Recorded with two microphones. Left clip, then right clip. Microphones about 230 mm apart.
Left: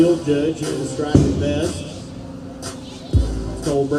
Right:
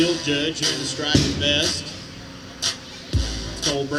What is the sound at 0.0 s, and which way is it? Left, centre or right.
Music, right.